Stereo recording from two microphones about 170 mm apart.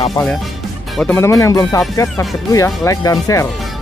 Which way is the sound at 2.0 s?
5° left (ahead or behind).